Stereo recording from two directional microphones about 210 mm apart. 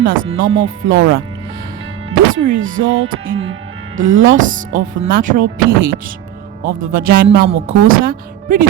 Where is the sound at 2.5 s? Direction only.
70° right (ahead or behind).